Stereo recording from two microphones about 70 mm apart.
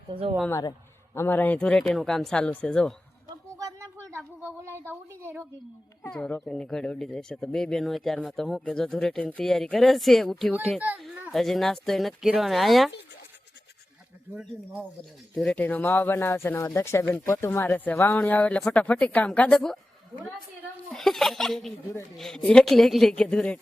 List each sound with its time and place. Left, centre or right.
1.1 s speech: left
1.5 s speech: centre
2.4 s speech: centre
3.6 s a sound: right
3.9 s a sound: right
4.6 s a woman's voice: right
6.1 s speech: centre
15.5 s speech: left
18.3 s speech: centre
20.9 s speech: centre